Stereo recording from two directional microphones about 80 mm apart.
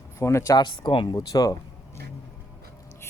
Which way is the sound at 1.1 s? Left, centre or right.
Left.